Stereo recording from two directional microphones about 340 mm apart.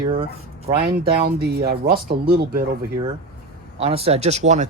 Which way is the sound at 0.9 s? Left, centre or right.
Right.